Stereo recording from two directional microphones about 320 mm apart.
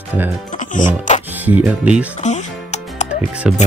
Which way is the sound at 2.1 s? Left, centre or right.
Left.